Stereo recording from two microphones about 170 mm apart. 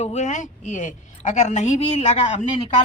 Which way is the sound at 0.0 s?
40° left (ahead or behind).